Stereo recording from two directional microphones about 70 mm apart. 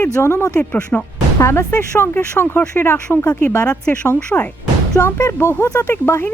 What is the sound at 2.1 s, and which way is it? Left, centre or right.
Speech, left.